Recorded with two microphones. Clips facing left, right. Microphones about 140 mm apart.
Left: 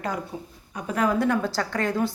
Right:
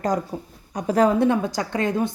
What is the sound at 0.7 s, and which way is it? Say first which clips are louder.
Speech: right 6 dB; 35° right (ahead or behind).